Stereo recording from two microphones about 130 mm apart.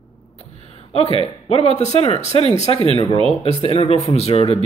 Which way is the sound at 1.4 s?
55° left (ahead or behind).